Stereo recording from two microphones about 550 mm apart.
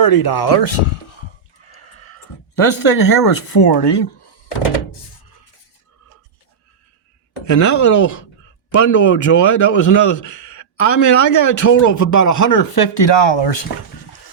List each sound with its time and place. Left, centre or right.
0.0 s a man's voice: left
2.6 s a man's voice: left
7.4 s a man's voice: left